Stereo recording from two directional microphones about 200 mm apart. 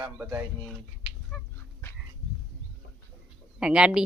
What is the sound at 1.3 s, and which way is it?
Dog, 10° left (ahead or behind).